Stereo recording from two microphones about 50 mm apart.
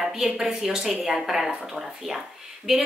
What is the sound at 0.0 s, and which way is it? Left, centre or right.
A woman's voice, centre.